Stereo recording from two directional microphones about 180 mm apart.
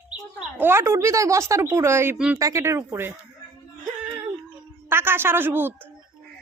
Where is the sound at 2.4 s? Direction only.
20° right (ahead or behind).